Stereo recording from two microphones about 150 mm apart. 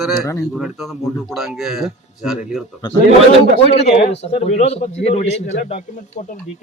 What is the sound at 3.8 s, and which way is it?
A man's voice, 45° left (ahead or behind).